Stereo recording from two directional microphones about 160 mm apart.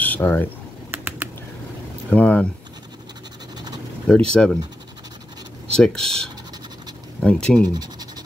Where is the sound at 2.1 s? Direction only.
10° left (ahead or behind).